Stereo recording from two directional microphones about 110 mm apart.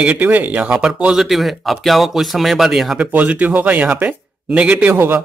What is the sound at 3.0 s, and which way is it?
Speech, 15° right (ahead or behind).